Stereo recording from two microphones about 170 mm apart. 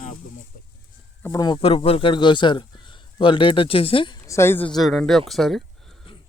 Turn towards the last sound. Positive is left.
turn(degrees=0)  # may be behind; listen again after turning